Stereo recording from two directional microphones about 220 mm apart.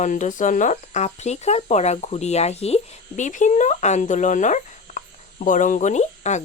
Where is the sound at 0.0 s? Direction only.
35° left (ahead or behind).